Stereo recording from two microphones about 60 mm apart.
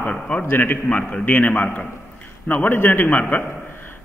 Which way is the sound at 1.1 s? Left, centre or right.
Left.